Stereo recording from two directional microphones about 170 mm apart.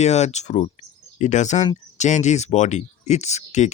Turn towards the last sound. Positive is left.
turn(degrees=40)  # may be behind; listen again after turning